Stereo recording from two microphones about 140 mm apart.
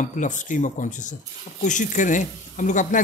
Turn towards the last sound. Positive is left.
turn(degrees=65)  # may be behind; listen again after turning